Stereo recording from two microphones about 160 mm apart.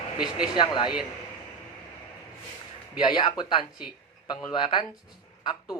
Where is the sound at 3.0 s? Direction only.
25° left (ahead or behind).